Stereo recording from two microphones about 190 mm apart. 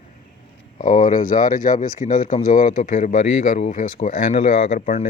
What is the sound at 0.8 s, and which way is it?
Speech, 45° left (ahead or behind).